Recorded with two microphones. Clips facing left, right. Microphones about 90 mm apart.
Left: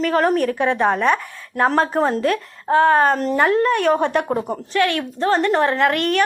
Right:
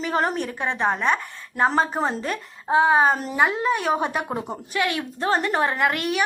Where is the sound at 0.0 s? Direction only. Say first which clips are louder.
Left 6 dB; 5° right (ahead or behind).